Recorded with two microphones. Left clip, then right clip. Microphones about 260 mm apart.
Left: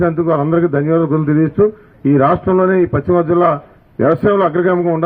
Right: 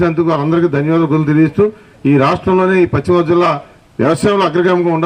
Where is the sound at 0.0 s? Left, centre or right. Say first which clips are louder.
Right 1 dB; right.